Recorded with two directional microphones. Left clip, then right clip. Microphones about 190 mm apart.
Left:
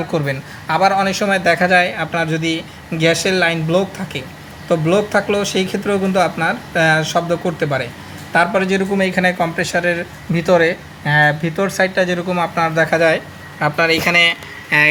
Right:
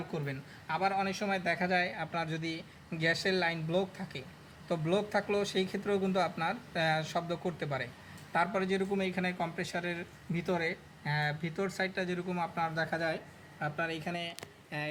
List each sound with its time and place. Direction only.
0.1 s a man's voice: 20° left (ahead or behind)